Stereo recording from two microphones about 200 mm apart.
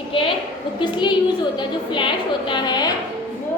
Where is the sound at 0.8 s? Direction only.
25° left (ahead or behind).